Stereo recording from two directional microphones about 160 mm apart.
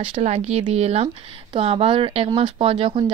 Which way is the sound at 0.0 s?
40° right (ahead or behind).